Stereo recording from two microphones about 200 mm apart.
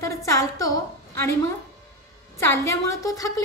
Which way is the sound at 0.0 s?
15° left (ahead or behind).